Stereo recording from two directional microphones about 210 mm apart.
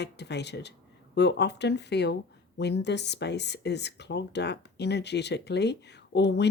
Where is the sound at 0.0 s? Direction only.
55° left (ahead or behind).